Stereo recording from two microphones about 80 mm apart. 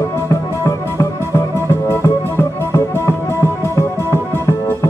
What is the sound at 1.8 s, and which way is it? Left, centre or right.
Music, left.